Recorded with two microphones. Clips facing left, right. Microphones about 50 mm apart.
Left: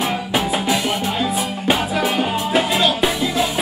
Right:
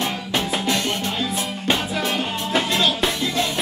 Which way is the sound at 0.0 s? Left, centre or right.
Centre.